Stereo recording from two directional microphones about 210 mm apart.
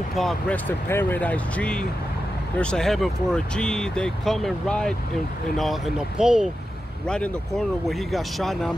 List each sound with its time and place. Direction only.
0.2 s speech: 5° left (ahead or behind)